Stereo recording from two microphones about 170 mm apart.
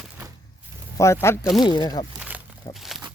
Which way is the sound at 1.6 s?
25° left (ahead or behind).